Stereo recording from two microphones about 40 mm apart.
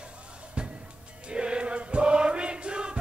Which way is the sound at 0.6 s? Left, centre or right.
Right.